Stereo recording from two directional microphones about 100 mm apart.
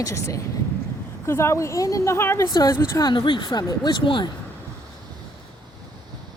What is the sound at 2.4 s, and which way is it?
Speech, 40° left (ahead or behind).